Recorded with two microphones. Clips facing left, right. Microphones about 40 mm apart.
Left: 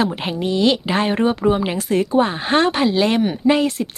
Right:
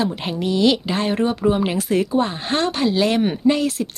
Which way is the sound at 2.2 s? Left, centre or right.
Left.